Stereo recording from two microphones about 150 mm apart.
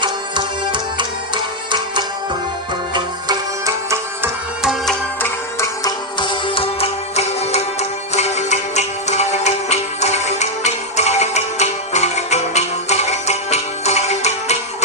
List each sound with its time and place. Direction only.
0.0 s music: 30° right (ahead or behind)
4.6 s music: centre (ahead or behind)
5.2 s music: 20° left (ahead or behind)
6.1 s music: 35° left (ahead or behind)